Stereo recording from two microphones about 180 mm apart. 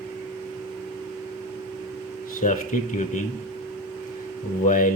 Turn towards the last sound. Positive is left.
turn(degrees=45)  # may be behind; listen again after turning